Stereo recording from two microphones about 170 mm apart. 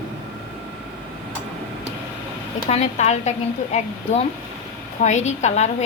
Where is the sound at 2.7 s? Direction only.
40° left (ahead or behind).